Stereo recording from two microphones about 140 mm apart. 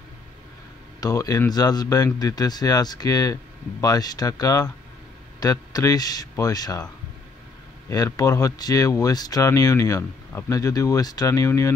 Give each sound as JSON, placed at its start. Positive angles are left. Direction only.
{"t": 1.0, "sound": "speech", "side_deg": 25}
{"t": 7.9, "sound": "speech", "side_deg": 25}